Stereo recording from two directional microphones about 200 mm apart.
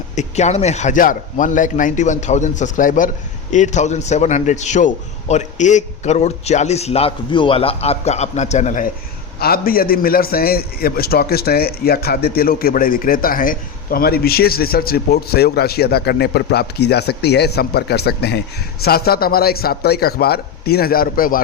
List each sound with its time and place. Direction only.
0.2 s a man's voice: 35° left (ahead or behind)